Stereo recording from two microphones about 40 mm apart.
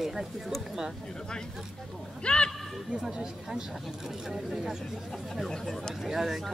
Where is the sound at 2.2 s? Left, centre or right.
Left.